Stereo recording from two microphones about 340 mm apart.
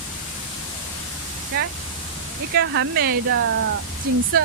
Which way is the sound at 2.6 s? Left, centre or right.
Right.